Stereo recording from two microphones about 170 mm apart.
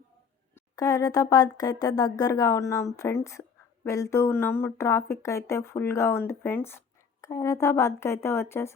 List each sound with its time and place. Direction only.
0.5 s speech: 20° left (ahead or behind)